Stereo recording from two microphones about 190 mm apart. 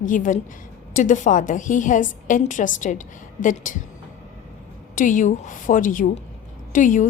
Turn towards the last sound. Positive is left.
turn(degrees=40)  # may be behind; listen again after turning